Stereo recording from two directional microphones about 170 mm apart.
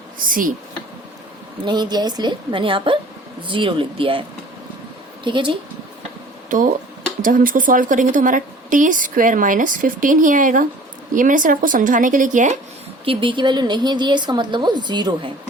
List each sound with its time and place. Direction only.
0.3 s a woman's voice: 55° right (ahead or behind)
1.6 s a woman's voice: 25° right (ahead or behind)
5.2 s a woman's voice: 30° right (ahead or behind)
6.5 s a woman's voice: 50° right (ahead or behind)
13.1 s a woman's voice: 30° right (ahead or behind)